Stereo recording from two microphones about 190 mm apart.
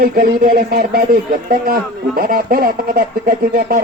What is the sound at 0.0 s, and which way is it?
Speech, 50° right (ahead or behind).